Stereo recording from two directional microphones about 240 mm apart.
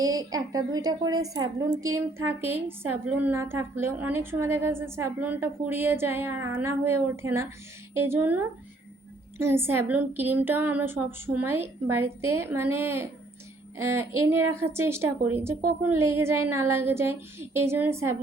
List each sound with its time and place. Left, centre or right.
0.0 s a woman's voice: centre